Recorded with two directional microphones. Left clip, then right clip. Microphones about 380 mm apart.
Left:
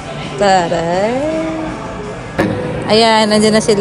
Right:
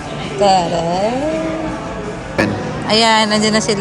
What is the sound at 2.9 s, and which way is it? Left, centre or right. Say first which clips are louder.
Speech: left 2 dB; centre.